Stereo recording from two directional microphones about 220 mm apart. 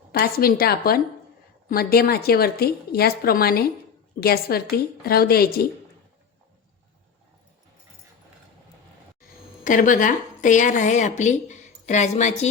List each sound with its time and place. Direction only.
0.1 s a woman's voice: 45° left (ahead or behind)
9.6 s a woman's voice: 35° left (ahead or behind)